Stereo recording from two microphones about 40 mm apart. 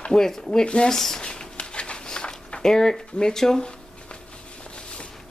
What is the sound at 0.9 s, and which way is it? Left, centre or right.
Speech, centre.